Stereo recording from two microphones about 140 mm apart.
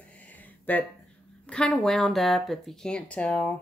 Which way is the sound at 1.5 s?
5° left (ahead or behind).